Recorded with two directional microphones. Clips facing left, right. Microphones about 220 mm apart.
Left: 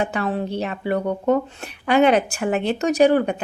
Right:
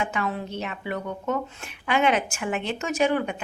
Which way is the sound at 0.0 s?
35° left (ahead or behind).